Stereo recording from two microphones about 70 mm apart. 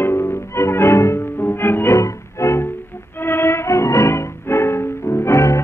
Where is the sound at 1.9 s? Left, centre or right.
Left.